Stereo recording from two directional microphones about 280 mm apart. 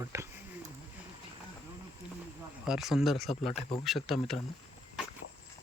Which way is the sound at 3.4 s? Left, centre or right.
Centre.